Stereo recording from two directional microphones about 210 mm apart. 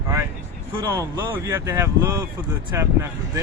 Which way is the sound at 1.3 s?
10° right (ahead or behind).